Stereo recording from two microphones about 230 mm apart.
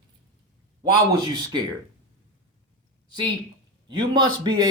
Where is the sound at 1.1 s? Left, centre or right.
Centre.